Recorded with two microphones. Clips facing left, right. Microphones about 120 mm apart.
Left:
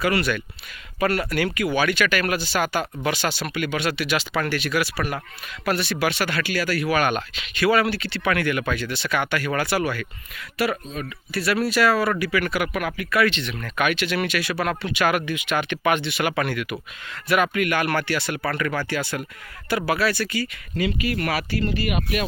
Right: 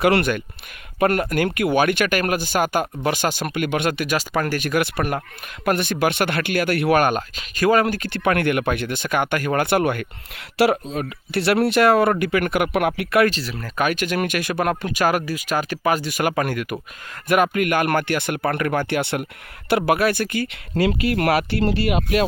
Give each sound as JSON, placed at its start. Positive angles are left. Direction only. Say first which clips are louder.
{"t": 0.0, "sound": "speech", "louder": "right 5 dB", "side_deg": -60}
{"t": 10.9, "sound": "speech", "louder": "right 5 dB", "side_deg": -65}
{"t": 13.3, "sound": "speech", "louder": "right 1 dB", "side_deg": -35}
{"t": 18.9, "sound": "speech", "louder": "right 4 dB", "side_deg": -60}